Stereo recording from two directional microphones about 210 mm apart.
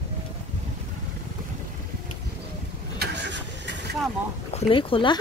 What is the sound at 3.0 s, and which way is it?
Vehicle, 55° right (ahead or behind).